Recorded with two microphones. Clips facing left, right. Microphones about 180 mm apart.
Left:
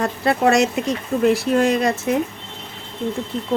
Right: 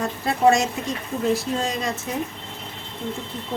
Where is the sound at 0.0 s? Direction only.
70° left (ahead or behind).